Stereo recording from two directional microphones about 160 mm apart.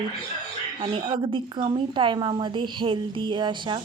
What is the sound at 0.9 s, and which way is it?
A woman's voice, 30° right (ahead or behind).